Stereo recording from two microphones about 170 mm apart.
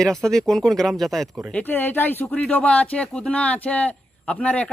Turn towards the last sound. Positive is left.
turn(degrees=5)  # may be behind; listen again after turning